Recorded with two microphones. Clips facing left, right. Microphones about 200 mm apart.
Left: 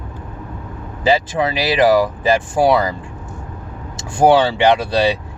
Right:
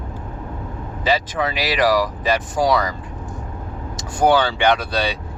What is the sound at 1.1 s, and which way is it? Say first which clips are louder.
Speech: left 4 dB; 25° left (ahead or behind).